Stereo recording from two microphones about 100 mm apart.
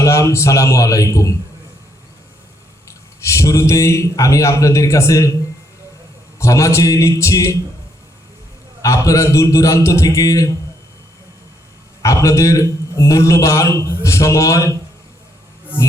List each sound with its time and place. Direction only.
0.0 s a man's voice: 30° left (ahead or behind)
3.2 s a man's voice: 30° left (ahead or behind)
6.4 s a man's voice: 30° left (ahead or behind)
8.8 s a man's voice: 35° left (ahead or behind)
12.0 s a man's voice: 30° left (ahead or behind)